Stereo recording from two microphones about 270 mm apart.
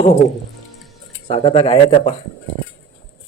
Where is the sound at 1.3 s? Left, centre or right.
Centre.